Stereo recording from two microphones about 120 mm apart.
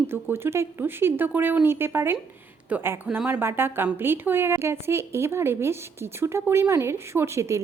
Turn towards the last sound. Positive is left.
turn(degrees=-25)  # may be behind; listen again after turning